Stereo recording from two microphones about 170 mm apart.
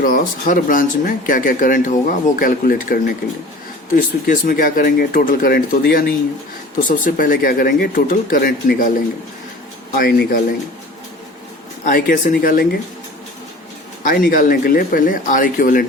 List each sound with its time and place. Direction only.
0.0 s speech: 55° left (ahead or behind)
6.8 s speech: 50° left (ahead or behind)
9.9 s speech: 65° left (ahead or behind)
11.9 s speech: 55° left (ahead or behind)
14.0 s speech: 55° left (ahead or behind)